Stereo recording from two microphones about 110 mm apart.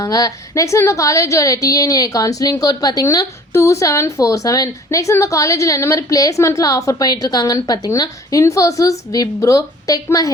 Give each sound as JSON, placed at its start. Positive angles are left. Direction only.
{"t": 0.0, "sound": "a woman's voice", "side_deg": 35}